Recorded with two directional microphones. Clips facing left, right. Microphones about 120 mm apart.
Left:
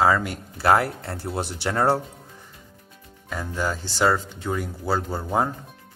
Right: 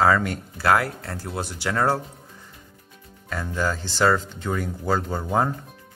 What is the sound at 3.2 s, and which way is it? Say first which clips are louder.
Speech: right 1 dB; 10° left (ahead or behind).